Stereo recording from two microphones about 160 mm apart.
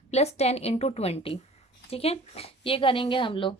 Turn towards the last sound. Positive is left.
turn(degrees=30)  # may be behind; listen again after turning